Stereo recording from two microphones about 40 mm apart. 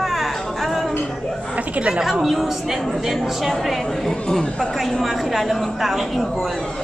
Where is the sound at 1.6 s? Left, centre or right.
Right.